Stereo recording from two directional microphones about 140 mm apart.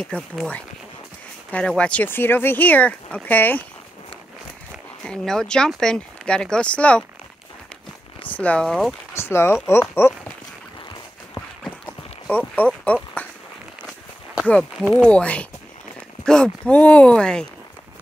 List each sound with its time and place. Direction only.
0.0 s speech: 5° left (ahead or behind)
5.0 s speech: 5° left (ahead or behind)
8.3 s speech: 10° left (ahead or behind)
9.1 s speech: 20° left (ahead or behind)
11.6 s clip-clop: 10° left (ahead or behind)
14.4 s speech: 5° left (ahead or behind)